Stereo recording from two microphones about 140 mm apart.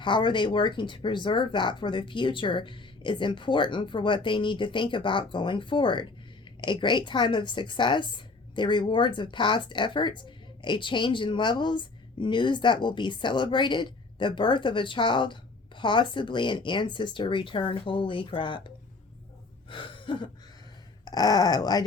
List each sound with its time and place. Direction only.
0.0 s a woman's voice: 35° left (ahead or behind)
19.7 s a sound: 35° left (ahead or behind)
21.0 s speech: 30° left (ahead or behind)